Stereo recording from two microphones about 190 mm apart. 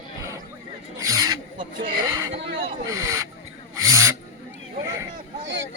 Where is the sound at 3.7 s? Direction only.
15° right (ahead or behind).